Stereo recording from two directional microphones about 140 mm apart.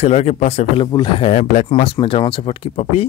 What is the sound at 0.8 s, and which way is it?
Speech, 35° left (ahead or behind).